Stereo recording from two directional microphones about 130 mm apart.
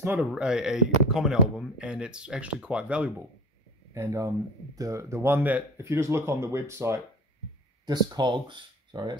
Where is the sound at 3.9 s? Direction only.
20° right (ahead or behind).